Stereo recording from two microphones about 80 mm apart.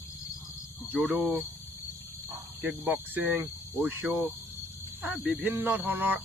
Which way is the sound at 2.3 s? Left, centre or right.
Centre.